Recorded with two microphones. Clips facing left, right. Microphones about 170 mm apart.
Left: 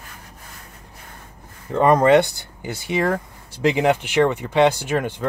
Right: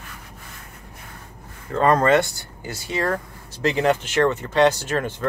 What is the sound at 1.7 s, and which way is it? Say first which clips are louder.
Speech: left 3 dB; 15° left (ahead or behind).